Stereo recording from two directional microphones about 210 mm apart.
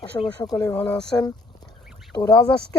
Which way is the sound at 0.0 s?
20° left (ahead or behind).